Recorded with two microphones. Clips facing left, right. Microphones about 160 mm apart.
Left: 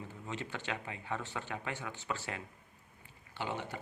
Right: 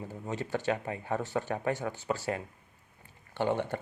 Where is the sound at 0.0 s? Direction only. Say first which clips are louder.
Right 6 dB; 40° right (ahead or behind).